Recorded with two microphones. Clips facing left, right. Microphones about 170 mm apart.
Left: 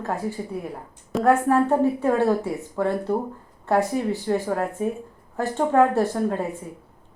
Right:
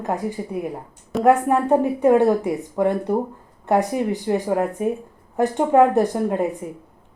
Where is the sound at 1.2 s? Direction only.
15° right (ahead or behind).